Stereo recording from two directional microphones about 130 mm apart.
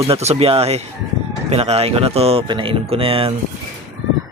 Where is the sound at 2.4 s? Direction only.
40° right (ahead or behind).